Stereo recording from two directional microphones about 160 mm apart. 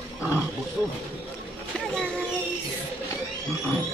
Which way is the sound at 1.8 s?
5° left (ahead or behind).